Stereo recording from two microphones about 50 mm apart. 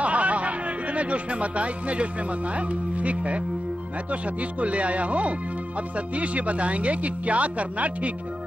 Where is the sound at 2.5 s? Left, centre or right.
Right.